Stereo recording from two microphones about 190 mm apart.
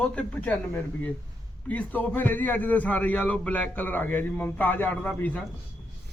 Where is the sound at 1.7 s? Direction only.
10° left (ahead or behind).